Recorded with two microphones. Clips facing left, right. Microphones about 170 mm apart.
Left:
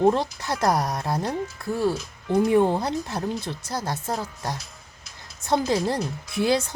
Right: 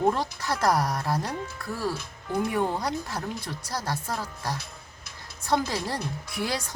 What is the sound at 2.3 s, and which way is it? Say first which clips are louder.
Speech: left 7 dB; 30° left (ahead or behind).